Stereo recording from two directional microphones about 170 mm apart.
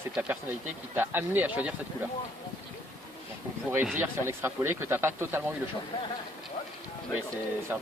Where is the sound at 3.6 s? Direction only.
10° right (ahead or behind).